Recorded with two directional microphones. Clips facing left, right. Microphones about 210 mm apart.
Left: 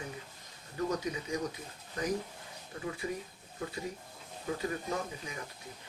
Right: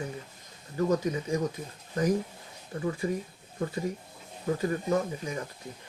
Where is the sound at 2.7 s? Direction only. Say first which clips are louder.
Right 8 dB; 45° right (ahead or behind).